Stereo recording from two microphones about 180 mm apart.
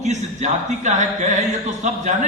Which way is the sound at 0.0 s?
40° right (ahead or behind).